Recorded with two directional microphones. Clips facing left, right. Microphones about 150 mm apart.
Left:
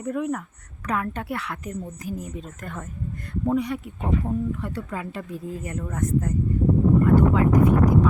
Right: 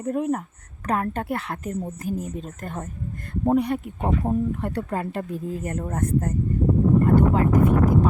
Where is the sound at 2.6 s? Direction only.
40° right (ahead or behind).